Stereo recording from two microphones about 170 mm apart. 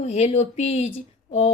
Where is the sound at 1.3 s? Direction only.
35° left (ahead or behind).